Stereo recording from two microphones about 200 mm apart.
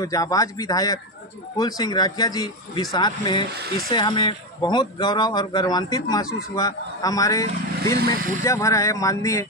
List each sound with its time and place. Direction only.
0.0 s a man's voice: 20° left (ahead or behind)
8.0 s speech: 50° right (ahead or behind)
8.5 s speech: 15° left (ahead or behind)